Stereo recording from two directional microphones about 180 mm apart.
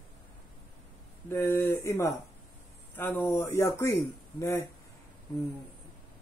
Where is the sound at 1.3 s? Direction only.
15° left (ahead or behind).